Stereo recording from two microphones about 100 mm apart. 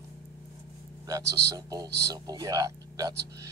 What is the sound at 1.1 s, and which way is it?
Speech, 40° right (ahead or behind).